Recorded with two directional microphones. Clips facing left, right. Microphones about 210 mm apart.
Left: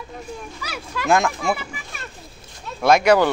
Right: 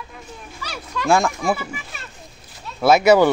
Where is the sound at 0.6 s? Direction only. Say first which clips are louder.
Right 5 dB; 5° left (ahead or behind).